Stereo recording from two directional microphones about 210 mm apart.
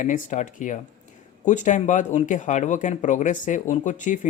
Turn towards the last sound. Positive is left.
turn(degrees=35)  # may be behind; listen again after turning